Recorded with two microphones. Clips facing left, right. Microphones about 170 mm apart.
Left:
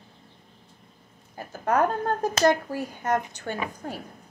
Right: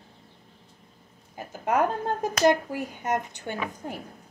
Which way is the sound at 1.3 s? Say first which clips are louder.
Left 1 dB; 15° right (ahead or behind).